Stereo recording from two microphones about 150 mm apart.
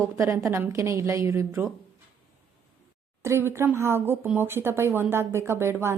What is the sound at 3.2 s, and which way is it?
A woman's voice, 15° right (ahead or behind).